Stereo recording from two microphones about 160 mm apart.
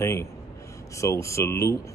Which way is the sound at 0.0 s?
15° left (ahead or behind).